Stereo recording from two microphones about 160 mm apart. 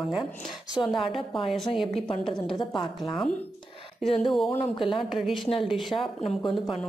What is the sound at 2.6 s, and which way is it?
Speech, 25° left (ahead or behind).